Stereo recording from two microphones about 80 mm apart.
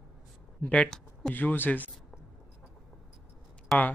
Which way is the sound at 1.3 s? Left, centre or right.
Left.